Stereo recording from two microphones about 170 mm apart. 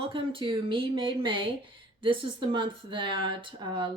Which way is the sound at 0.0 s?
30° right (ahead or behind).